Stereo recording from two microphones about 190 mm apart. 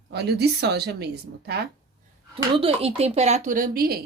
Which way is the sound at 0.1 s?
60° right (ahead or behind).